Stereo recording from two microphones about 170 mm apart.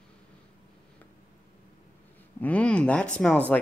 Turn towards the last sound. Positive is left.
turn(degrees=5)  # may be behind; listen again after turning